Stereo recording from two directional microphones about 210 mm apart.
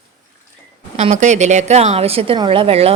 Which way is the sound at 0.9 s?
35° right (ahead or behind).